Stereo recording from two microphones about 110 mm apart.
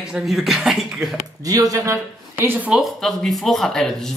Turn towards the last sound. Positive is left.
turn(degrees=5)  # may be behind; listen again after turning